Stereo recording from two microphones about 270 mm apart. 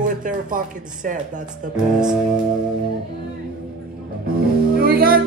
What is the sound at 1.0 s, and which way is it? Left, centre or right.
Music, right.